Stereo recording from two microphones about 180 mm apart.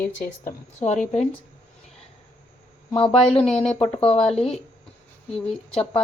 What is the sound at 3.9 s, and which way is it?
Speech, 35° left (ahead or behind).